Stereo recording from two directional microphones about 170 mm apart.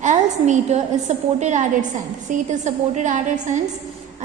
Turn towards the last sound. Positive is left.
turn(degrees=-45)  # may be behind; listen again after turning